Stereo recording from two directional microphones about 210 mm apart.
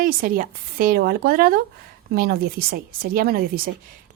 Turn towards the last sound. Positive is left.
turn(degrees=-45)  # may be behind; listen again after turning